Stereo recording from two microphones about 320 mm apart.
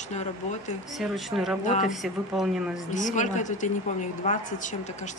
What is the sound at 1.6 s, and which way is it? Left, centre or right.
Speech, left.